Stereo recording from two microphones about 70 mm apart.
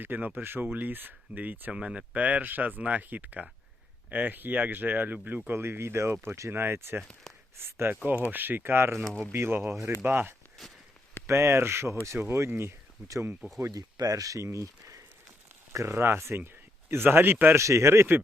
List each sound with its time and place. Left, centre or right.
0.0 s speech: right
6.5 s speech: right
10.6 s a sound: centre
11.3 s speech: right
13.7 s speech: right
17.6 s speech: right